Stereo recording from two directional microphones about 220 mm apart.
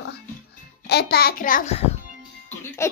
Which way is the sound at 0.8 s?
45° left (ahead or behind).